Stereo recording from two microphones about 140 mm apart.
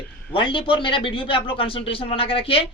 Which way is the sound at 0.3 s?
40° left (ahead or behind).